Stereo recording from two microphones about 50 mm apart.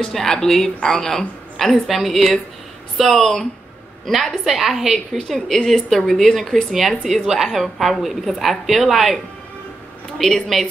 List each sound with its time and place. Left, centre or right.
0.0 s a woman's voice: centre